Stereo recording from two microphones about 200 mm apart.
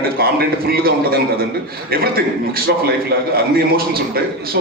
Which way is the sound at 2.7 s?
55° right (ahead or behind).